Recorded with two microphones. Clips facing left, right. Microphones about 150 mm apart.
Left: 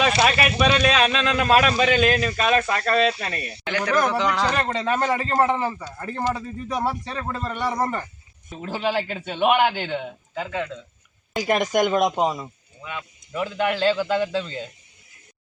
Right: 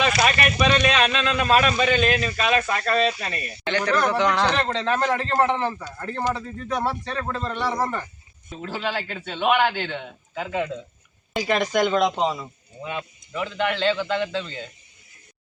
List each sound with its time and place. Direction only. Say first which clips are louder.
0.3 s speech: left 1 dB; 5° left (ahead or behind)
10.3 s speech: right 2 dB; 5° right (ahead or behind)
11.8 s speech: even; 15° left (ahead or behind)
12.8 s speech: right 4 dB; 25° right (ahead or behind)
13.3 s speech: left 1 dB; 5° left (ahead or behind)